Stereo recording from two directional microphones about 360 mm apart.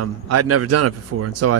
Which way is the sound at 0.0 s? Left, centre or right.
Right.